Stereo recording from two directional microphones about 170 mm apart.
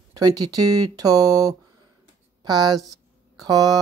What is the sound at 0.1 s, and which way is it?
Speech, 20° right (ahead or behind).